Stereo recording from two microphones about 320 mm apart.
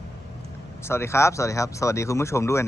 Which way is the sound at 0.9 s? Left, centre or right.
Centre.